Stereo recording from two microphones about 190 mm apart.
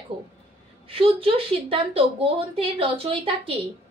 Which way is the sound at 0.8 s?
30° right (ahead or behind).